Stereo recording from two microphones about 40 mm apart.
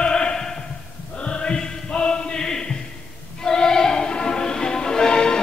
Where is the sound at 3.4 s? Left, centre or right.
Centre.